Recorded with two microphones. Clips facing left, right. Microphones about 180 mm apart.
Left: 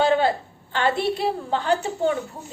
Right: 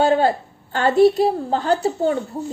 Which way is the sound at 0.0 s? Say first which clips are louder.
Right 3 dB; 40° right (ahead or behind).